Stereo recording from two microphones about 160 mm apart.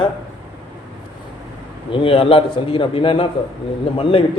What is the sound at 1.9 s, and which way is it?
A man's voice, 35° left (ahead or behind).